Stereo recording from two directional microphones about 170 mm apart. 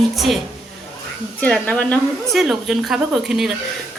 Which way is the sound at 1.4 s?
5° left (ahead or behind).